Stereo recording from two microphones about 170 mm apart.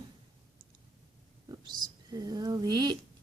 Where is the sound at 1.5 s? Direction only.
25° right (ahead or behind).